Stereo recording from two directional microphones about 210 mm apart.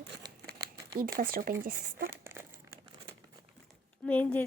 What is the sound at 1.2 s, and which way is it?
Speech, 45° right (ahead or behind).